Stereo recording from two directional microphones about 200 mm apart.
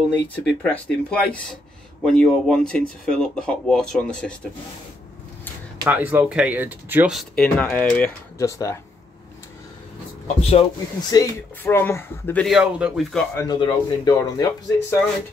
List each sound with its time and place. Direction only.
0.4 s speech: 5° left (ahead or behind)
5.9 s speech: 10° right (ahead or behind); by 8.7 s 15° left (ahead or behind)
10.5 s speech: 30° left (ahead or behind)
11.1 s speech: 10° left (ahead or behind)
12.4 s speech: 5° right (ahead or behind)
13.3 s speech: 15° left (ahead or behind)